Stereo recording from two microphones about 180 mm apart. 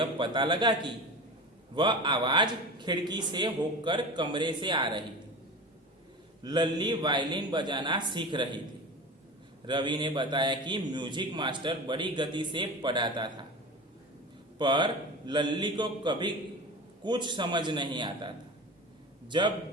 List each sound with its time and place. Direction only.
0.0 s a man's voice: 25° right (ahead or behind)
6.4 s a man's voice: 25° right (ahead or behind)
9.6 s a man's voice: 25° right (ahead or behind)
14.6 s a man's voice: 25° right (ahead or behind)
19.3 s a man's voice: 25° right (ahead or behind)